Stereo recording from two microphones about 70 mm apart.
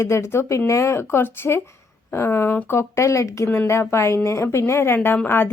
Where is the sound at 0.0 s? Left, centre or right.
Left.